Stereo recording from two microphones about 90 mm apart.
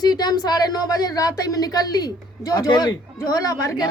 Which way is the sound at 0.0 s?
50° left (ahead or behind).